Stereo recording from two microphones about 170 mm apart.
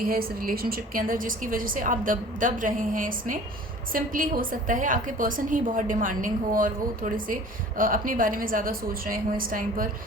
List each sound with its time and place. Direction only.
0.0 s a woman's voice: 60° right (ahead or behind)